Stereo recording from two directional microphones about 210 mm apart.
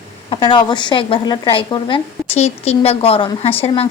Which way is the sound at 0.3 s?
20° left (ahead or behind).